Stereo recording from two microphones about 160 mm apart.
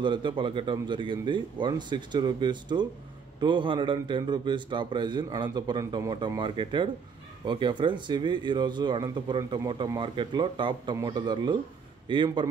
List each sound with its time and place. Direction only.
0.0 s a man's voice: 30° right (ahead or behind)